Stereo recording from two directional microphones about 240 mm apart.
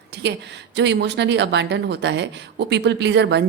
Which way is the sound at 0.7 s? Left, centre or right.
Right.